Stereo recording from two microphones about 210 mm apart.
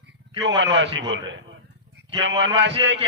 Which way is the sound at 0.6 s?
55° right (ahead or behind).